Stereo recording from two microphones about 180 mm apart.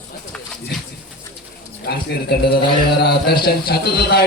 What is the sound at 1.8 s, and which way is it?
A man's voice, 65° left (ahead or behind).